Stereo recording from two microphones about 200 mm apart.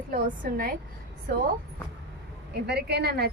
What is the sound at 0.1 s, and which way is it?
Speech, 50° right (ahead or behind).